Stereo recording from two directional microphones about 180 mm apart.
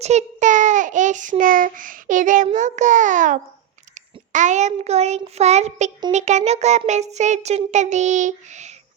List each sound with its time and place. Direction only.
0.0 s a child's voice: 40° right (ahead or behind)
4.3 s child singing: 40° right (ahead or behind)